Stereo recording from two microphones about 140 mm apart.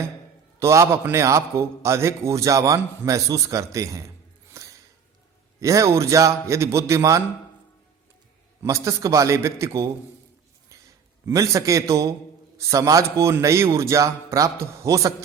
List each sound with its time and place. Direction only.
0.6 s a man's voice: 20° right (ahead or behind)
4.6 s a sound: 20° right (ahead or behind)
5.5 s a man's voice: 20° right (ahead or behind)
8.6 s a man's voice: 20° right (ahead or behind)
10.7 s a sound: 20° right (ahead or behind)
12.5 s a man's voice: 20° right (ahead or behind)